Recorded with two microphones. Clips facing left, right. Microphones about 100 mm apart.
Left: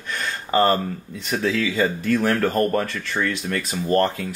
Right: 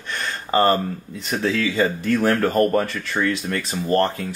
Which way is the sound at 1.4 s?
20° right (ahead or behind).